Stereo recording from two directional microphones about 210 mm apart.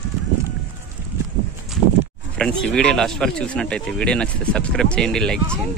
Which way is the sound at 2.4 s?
5° left (ahead or behind).